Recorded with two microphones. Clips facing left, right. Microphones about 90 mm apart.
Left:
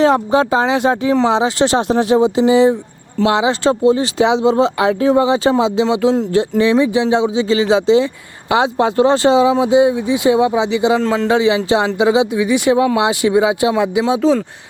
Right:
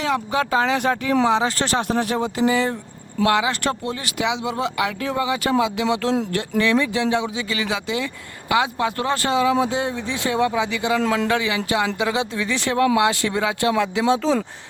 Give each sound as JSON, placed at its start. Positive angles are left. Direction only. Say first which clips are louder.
{"t": 0.0, "sound": "speech", "louder": "left 9 dB", "side_deg": 35}